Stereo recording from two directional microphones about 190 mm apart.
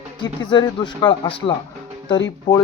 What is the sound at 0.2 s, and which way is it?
Speech, 25° left (ahead or behind).